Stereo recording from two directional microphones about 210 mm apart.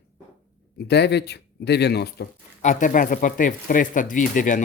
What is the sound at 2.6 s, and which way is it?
Speech, 40° left (ahead or behind).